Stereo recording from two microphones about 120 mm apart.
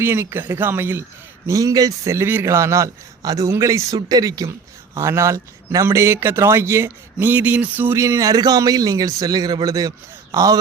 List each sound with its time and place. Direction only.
0.0 s a man's voice: 20° right (ahead or behind)